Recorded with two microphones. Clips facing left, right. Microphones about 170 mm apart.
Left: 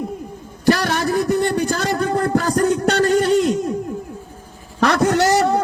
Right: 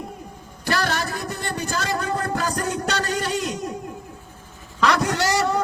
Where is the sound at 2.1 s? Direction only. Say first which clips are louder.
Left 7 dB; 55° left (ahead or behind).